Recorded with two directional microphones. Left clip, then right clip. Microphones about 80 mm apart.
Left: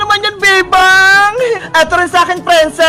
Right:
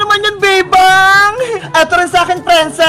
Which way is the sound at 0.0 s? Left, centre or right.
Left.